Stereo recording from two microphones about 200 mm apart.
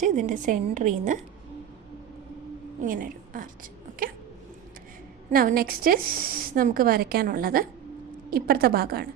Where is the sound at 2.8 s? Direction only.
45° right (ahead or behind).